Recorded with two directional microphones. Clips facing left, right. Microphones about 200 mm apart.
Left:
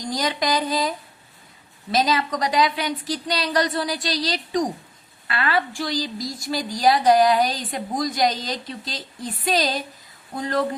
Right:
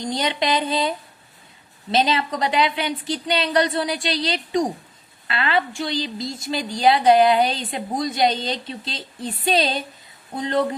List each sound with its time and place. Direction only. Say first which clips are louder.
0.0 s a woman's voice: right 1 dB; 25° right (ahead or behind)